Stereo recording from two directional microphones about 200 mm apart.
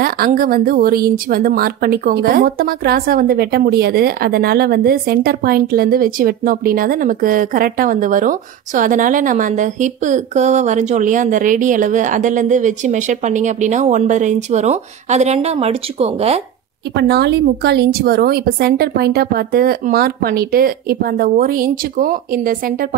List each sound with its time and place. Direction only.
0.0 s a woman's voice: 45° right (ahead or behind); by 16.3 s 30° right (ahead or behind)
16.9 s a woman's voice: 55° right (ahead or behind)